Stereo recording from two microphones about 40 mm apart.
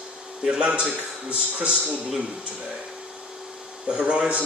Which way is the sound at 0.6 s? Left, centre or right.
Right.